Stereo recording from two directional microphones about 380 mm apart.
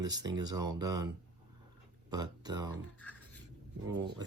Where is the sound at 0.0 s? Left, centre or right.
Centre.